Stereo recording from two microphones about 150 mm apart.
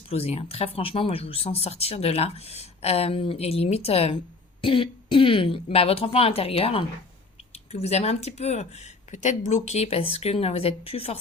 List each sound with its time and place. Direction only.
0.1 s speech: 40° left (ahead or behind)